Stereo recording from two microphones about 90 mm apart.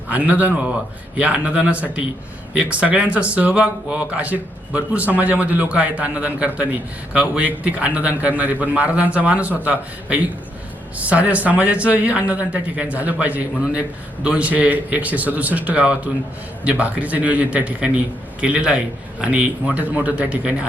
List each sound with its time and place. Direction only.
0.1 s speech: 15° right (ahead or behind)